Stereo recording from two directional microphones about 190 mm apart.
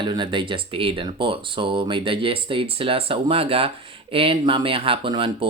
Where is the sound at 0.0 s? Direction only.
25° right (ahead or behind).